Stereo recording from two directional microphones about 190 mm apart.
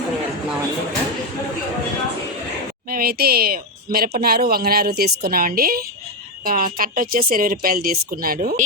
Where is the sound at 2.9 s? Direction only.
50° right (ahead or behind).